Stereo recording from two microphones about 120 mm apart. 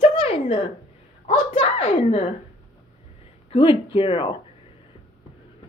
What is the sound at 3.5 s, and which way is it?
Speech, 50° left (ahead or behind).